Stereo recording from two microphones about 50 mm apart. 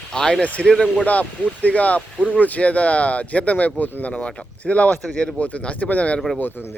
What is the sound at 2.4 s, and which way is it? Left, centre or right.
Speech, left.